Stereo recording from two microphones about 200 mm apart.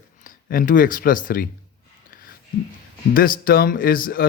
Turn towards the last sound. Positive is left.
turn(degrees=45)  # may be behind; listen again after turning